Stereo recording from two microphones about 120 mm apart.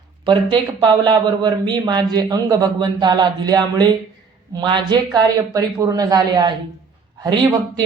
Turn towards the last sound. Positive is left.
turn(degrees=-35)  # may be behind; listen again after turning